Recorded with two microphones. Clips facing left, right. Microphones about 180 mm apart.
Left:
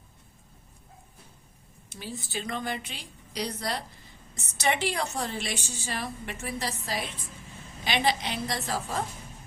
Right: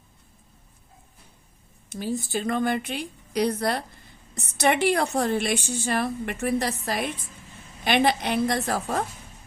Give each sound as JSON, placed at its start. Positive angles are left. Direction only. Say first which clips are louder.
{"t": 1.9, "sound": "a woman's voice", "louder": "right 10 dB", "side_deg": -45}